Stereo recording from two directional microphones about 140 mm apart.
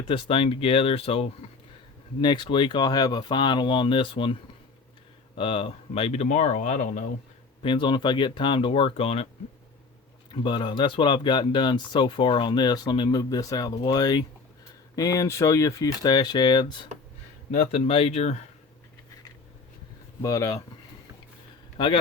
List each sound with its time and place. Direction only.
0.1 s speech: 40° left (ahead or behind)
5.4 s speech: 40° left (ahead or behind)
6.2 s speech: 60° left (ahead or behind)
7.6 s speech: 35° left (ahead or behind)
10.3 s speech: 35° left (ahead or behind)
17.5 s speech: 50° left (ahead or behind)
20.2 s speech: 25° left (ahead or behind)